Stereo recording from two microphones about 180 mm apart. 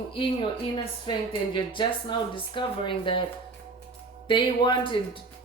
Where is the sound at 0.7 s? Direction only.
25° left (ahead or behind).